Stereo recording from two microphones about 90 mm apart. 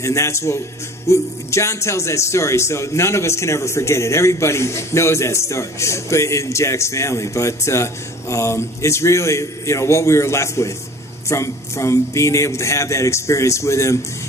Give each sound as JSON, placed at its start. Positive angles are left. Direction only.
{"t": 0.0, "sound": "speech", "side_deg": 35}